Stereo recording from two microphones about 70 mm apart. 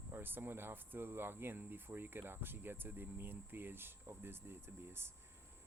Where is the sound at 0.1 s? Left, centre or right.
Right.